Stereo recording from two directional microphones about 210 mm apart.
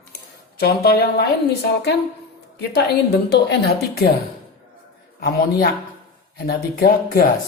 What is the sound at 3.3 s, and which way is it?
Speech, 50° left (ahead or behind).